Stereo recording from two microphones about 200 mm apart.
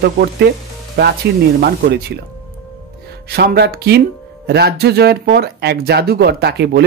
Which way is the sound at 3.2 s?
55° right (ahead or behind).